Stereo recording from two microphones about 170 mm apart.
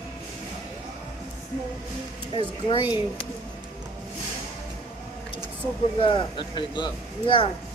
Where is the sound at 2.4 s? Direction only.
30° left (ahead or behind).